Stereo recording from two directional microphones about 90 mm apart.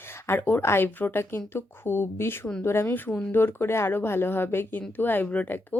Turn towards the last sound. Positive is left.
turn(degrees=20)  # may be behind; listen again after turning